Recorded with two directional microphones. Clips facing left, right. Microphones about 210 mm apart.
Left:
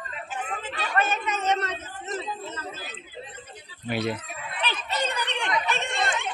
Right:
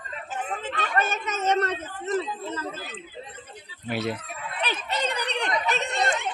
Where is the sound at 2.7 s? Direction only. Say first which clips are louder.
Right 2 dB; 55° right (ahead or behind).